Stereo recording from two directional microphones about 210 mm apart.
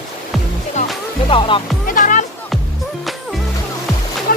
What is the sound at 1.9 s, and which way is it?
Music, 40° left (ahead or behind).